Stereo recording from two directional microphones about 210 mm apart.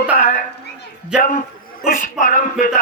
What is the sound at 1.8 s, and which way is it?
Speech, 40° left (ahead or behind).